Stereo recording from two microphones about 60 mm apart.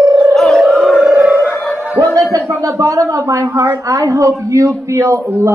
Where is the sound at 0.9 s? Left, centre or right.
Centre.